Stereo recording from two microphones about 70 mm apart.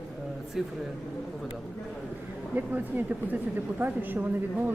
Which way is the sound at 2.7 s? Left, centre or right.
Right.